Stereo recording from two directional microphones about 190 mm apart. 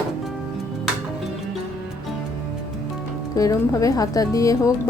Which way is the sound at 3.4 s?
20° left (ahead or behind).